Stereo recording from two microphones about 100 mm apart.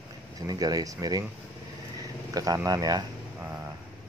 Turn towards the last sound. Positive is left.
turn(degrees=-20)  # may be behind; listen again after turning